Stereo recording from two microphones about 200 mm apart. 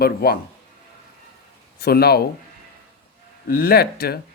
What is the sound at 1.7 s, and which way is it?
Speech, 50° left (ahead or behind).